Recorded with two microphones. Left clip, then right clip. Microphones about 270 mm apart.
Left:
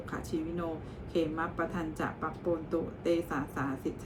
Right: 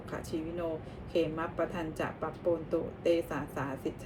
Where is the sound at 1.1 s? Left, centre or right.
Centre.